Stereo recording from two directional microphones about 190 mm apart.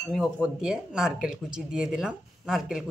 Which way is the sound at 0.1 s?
Centre (ahead or behind).